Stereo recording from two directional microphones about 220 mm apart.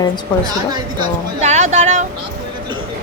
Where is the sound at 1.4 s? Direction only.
30° right (ahead or behind).